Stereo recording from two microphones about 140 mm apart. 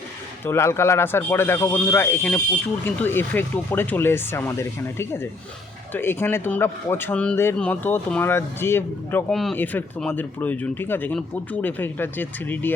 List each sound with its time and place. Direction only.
0.4 s speech: 20° left (ahead or behind)
9.3 s speech: centre (ahead or behind)
9.6 s speech: 15° left (ahead or behind)